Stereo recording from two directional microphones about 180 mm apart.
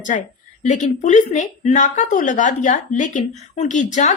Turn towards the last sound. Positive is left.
turn(degrees=40)  # may be behind; listen again after turning